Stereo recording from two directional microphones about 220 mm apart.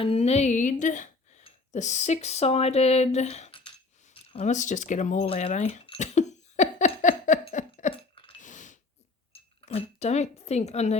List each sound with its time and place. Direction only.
0.0 s speech: 25° left (ahead or behind)
5.8 s a sound: 30° left (ahead or behind)
9.3 s speech: 25° left (ahead or behind)